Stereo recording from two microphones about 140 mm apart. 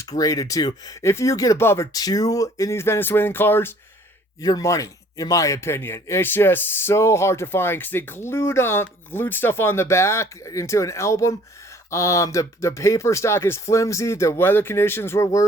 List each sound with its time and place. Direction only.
0.1 s speech: 25° left (ahead or behind)